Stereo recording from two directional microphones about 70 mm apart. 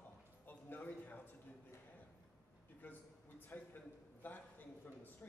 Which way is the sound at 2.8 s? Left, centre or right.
Left.